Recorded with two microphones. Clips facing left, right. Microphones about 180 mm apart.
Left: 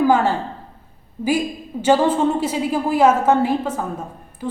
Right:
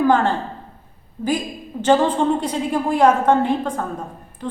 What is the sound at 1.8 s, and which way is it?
A woman's voice, 10° left (ahead or behind).